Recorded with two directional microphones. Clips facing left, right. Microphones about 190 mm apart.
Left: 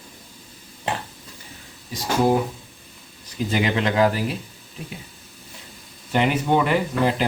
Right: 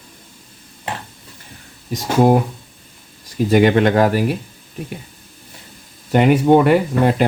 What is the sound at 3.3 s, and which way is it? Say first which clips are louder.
Speech: right 9 dB; 55° right (ahead or behind).